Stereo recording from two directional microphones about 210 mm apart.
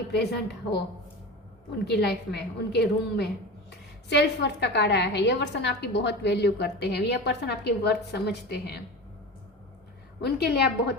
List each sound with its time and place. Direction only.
0.1 s a woman's voice: 50° left (ahead or behind)
1.8 s a woman's voice: 50° left (ahead or behind)
10.2 s a woman's voice: 50° left (ahead or behind)